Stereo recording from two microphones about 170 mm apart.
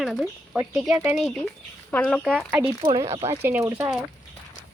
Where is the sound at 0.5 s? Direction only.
15° right (ahead or behind).